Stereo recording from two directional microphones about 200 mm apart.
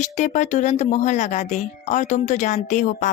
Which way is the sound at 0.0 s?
35° left (ahead or behind).